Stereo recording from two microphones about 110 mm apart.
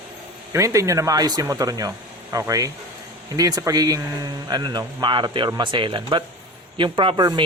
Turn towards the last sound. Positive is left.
turn(degrees=-45)  # may be behind; listen again after turning